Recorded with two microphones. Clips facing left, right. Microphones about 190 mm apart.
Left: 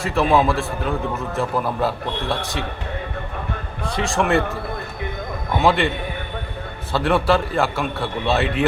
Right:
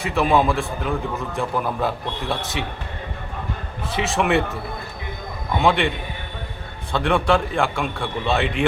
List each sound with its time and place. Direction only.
0.0 s a man's voice: centre (ahead or behind)
3.9 s a man's voice: 5° right (ahead or behind)
5.5 s a man's voice: centre (ahead or behind)
6.9 s a man's voice: 5° left (ahead or behind)